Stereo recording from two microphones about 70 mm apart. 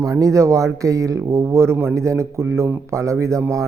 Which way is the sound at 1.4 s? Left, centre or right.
Right.